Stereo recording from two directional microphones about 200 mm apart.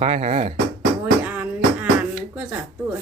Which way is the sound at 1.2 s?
5° right (ahead or behind).